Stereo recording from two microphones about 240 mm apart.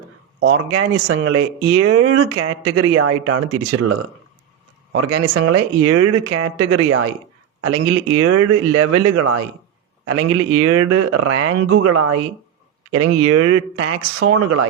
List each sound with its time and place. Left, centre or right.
0.3 s speech: right